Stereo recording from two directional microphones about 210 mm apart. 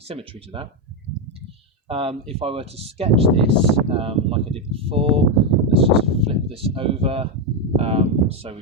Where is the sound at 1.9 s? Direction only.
25° right (ahead or behind).